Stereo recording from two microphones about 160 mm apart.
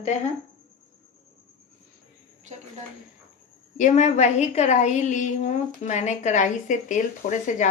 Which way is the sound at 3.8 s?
45° left (ahead or behind).